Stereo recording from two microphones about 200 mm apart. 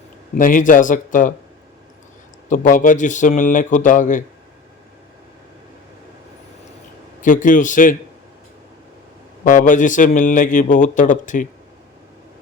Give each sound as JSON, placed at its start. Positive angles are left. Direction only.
{"t": 0.3, "sound": "a man's voice", "side_deg": 40}
{"t": 2.5, "sound": "a man's voice", "side_deg": 40}
{"t": 7.2, "sound": "a man's voice", "side_deg": 40}
{"t": 9.4, "sound": "a man's voice", "side_deg": 40}